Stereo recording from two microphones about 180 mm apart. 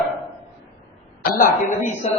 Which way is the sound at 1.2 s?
50° left (ahead or behind).